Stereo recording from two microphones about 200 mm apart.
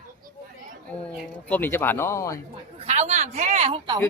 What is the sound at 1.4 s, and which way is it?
Speech, 10° left (ahead or behind).